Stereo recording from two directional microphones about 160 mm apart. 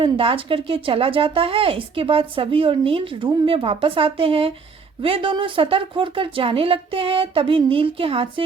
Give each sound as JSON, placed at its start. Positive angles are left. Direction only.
{"t": 0.0, "sound": "a woman's voice", "side_deg": -35}